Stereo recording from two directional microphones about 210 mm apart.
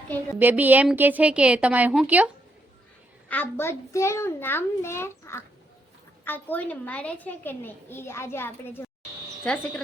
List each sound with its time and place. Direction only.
0.3 s a woman's voice: 10° right (ahead or behind)
3.2 s a child's voice: 10° left (ahead or behind)